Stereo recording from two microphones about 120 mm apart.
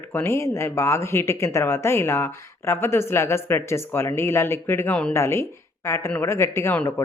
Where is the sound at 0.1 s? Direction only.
20° left (ahead or behind).